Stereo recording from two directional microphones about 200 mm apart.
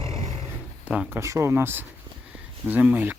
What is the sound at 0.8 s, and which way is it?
Speech, 5° right (ahead or behind).